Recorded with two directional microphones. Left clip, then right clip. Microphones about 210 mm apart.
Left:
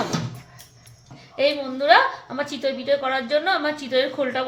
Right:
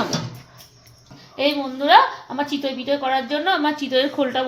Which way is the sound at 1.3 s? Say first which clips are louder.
Even; 5° right (ahead or behind).